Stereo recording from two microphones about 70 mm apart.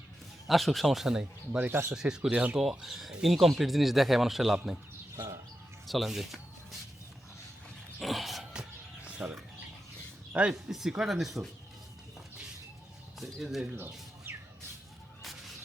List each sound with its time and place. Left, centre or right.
0.4 s speech: centre
1.2 s speech: right
1.9 s speech: centre
2.3 s speech: centre
2.6 s speech: centre
5.1 s bird: right
5.8 s music: centre
7.9 s dog: centre
9.0 s bird: centre
10.5 s speech: centre
13.1 s speech: centre
13.7 s a sound: right
15.2 s whip: centre